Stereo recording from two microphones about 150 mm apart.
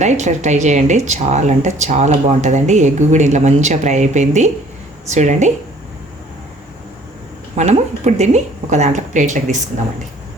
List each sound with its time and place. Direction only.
0.0 s speech: 50° right (ahead or behind)
7.5 s speech: 50° right (ahead or behind)